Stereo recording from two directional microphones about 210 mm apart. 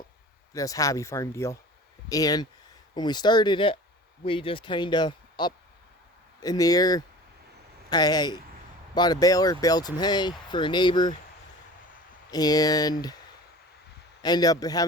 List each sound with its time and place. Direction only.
0.5 s speech: 15° left (ahead or behind)
12.3 s speech: 20° left (ahead or behind)
14.2 s speech: 20° left (ahead or behind)